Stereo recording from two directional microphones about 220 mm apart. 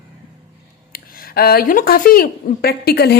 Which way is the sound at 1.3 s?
45° left (ahead or behind).